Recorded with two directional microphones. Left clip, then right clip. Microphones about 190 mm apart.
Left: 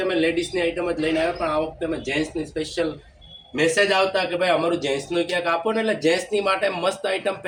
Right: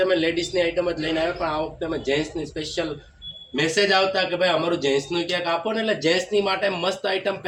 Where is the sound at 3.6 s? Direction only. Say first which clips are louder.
Left 1 dB; 15° left (ahead or behind).